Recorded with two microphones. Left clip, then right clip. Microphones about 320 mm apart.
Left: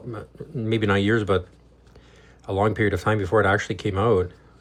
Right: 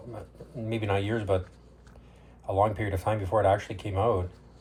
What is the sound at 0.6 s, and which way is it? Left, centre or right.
Speech, left.